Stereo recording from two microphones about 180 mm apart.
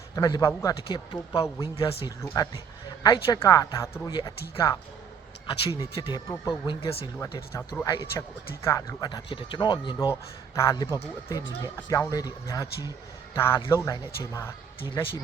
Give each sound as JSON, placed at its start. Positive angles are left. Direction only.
{"t": 0.2, "sound": "speech", "side_deg": 20}
{"t": 0.8, "sound": "speech", "side_deg": 30}
{"t": 1.7, "sound": "speech", "side_deg": 35}
{"t": 2.0, "sound": "speech", "side_deg": 20}
{"t": 7.2, "sound": "speech", "side_deg": 15}
{"t": 14.8, "sound": "speech", "side_deg": 30}